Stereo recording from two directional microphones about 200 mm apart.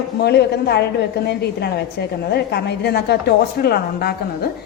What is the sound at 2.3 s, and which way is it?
A woman's voice, 55° left (ahead or behind).